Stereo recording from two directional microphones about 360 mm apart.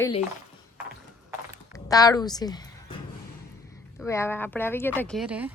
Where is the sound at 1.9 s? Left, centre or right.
Centre.